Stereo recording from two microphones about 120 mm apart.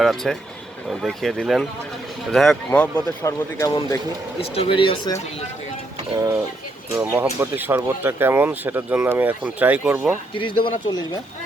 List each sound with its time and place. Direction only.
0.0 s speech: centre (ahead or behind)
3.2 s speech: 25° left (ahead or behind)
4.4 s speech: 50° left (ahead or behind)
6.1 s speech: 20° right (ahead or behind)
10.3 s speech: 45° left (ahead or behind)